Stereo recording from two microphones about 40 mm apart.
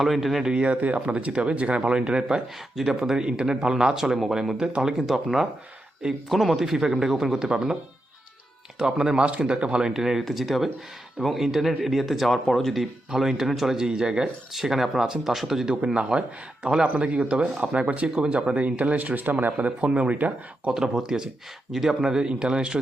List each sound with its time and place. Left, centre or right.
0.0 s speech: centre
0.4 s speech: right
0.7 s speech: right; by 2.4 s centre
2.7 s speech: centre
8.8 s speech: centre
9.9 s speech: centre
14.5 s speech: centre
16.1 s speech: right
20.7 s speech: centre